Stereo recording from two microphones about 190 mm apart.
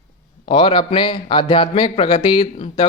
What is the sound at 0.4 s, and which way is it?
Speech, 25° left (ahead or behind).